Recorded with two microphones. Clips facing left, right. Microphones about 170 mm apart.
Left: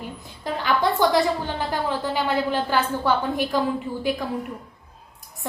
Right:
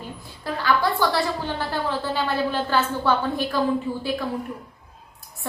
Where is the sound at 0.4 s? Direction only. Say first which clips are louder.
Even; 20° left (ahead or behind).